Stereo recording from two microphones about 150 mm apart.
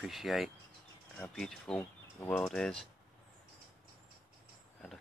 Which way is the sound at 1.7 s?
15° left (ahead or behind).